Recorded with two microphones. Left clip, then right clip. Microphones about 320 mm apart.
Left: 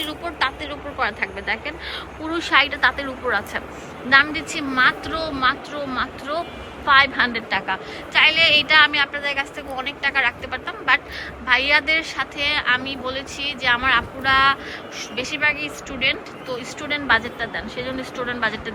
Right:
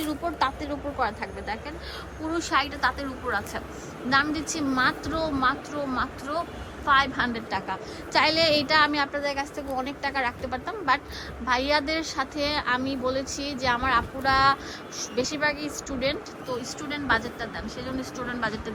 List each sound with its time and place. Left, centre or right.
0.1 s a woman's voice: centre